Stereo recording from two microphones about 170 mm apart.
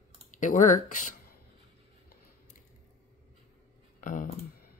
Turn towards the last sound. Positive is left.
turn(degrees=50)  # may be behind; listen again after turning